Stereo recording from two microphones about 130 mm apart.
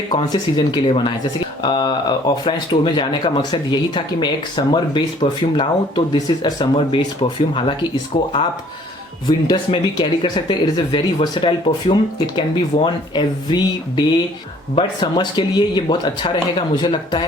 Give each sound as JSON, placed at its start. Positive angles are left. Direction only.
{"t": 0.3, "sound": "speech", "side_deg": 35}
{"t": 9.2, "sound": "speech", "side_deg": 35}